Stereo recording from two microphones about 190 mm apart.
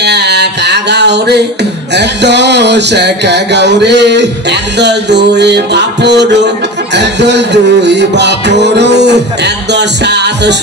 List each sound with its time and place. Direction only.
0.0 s music: 60° right (ahead or behind)